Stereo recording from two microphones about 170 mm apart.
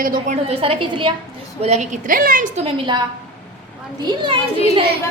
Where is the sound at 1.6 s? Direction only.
40° right (ahead or behind).